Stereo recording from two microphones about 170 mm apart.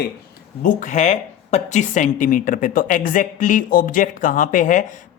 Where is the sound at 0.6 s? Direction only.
45° left (ahead or behind).